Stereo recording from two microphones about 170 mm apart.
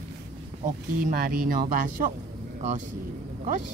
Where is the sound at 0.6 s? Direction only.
55° right (ahead or behind).